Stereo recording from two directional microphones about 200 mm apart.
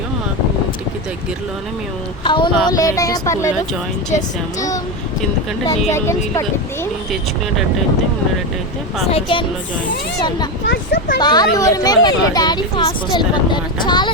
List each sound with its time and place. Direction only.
2.2 s speech: 25° left (ahead or behind)
5.6 s speech: 15° left (ahead or behind)
9.1 s speech: 25° left (ahead or behind)
10.7 s speech: 60° left (ahead or behind)
11.2 s speech: 20° left (ahead or behind)